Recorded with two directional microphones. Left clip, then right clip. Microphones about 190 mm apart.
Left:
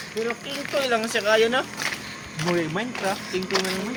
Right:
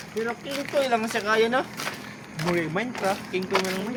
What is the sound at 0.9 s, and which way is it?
Speech, 65° right (ahead or behind).